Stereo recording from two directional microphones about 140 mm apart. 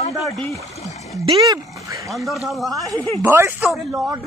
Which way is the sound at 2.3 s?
Centre (ahead or behind).